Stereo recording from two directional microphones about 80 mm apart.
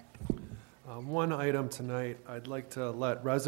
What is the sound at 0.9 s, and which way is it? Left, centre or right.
Speech, left.